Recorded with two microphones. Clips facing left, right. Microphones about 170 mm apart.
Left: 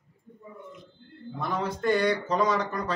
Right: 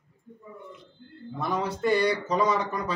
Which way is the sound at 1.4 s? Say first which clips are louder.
Right 2 dB; 5° right (ahead or behind).